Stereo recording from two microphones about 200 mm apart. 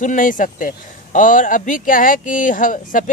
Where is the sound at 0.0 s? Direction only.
40° left (ahead or behind).